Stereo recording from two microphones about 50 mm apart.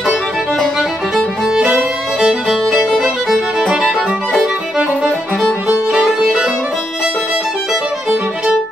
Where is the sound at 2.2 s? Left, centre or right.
Centre.